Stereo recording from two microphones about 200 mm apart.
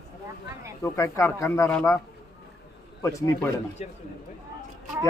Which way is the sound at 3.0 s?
15° left (ahead or behind).